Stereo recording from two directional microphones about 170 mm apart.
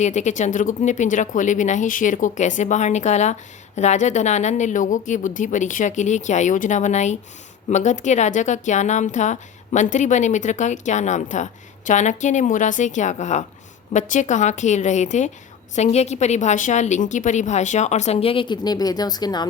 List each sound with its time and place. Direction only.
0.0 s a woman's voice: 45° left (ahead or behind); by 19.5 s 25° left (ahead or behind)